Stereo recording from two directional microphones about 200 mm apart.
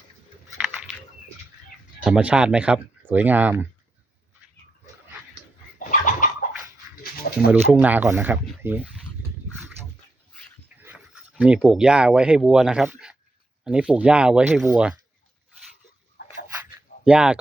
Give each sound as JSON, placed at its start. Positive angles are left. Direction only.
{"t": 2.0, "sound": "speech", "side_deg": -5}
{"t": 5.9, "sound": "a sound", "side_deg": 40}
{"t": 7.5, "sound": "speech", "side_deg": -10}
{"t": 10.8, "sound": "speech", "side_deg": -5}
{"t": 17.1, "sound": "speech", "side_deg": -5}